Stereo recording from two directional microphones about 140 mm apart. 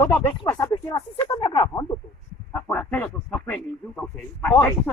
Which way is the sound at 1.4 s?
35° left (ahead or behind).